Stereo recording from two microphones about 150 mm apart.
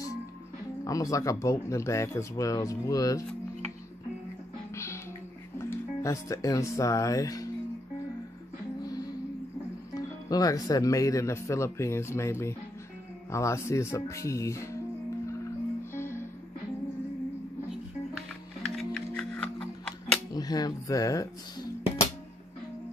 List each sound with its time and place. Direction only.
0.8 s speech: 20° left (ahead or behind)
5.6 s speech: 20° left (ahead or behind)
8.8 s music: 25° left (ahead or behind)
9.9 s speech: 25° left (ahead or behind)
15.9 s music: 15° left (ahead or behind)
18.8 s music: 5° left (ahead or behind)
20.3 s speech: 25° left (ahead or behind)